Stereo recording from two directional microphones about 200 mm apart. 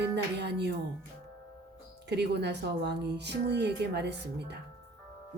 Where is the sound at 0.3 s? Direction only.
60° right (ahead or behind).